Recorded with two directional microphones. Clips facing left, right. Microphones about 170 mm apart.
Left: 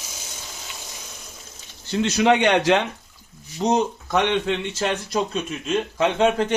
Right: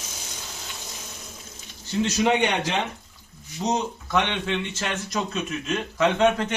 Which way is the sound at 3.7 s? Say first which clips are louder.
Left 3 dB; 40° left (ahead or behind).